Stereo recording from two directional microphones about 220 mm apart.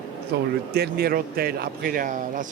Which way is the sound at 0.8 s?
45° right (ahead or behind).